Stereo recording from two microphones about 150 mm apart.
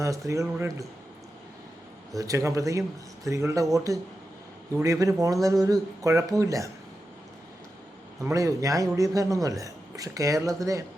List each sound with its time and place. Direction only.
0.0 s a man's voice: 20° right (ahead or behind)
2.1 s a man's voice: 20° right (ahead or behind)
8.2 s a man's voice: 20° right (ahead or behind)